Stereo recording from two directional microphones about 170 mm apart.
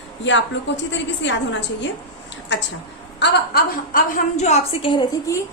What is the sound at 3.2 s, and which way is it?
Speech, 70° left (ahead or behind).